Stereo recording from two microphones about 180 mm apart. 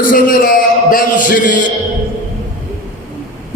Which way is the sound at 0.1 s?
50° left (ahead or behind).